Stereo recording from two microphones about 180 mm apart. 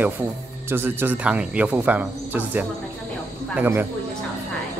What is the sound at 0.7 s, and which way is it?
Speech, 10° right (ahead or behind).